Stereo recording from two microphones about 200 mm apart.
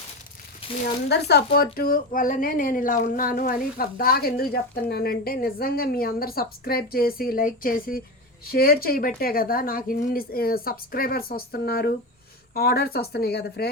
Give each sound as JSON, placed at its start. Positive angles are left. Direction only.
{"t": 1.0, "sound": "speech", "side_deg": 55}